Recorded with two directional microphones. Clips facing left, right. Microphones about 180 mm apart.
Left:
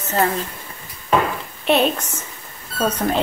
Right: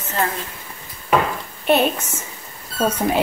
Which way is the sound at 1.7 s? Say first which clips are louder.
Even; 5° right (ahead or behind).